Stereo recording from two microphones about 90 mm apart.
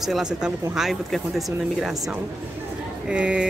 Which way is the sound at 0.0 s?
5° right (ahead or behind).